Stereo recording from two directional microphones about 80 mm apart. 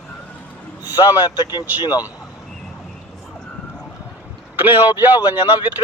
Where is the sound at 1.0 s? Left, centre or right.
Right.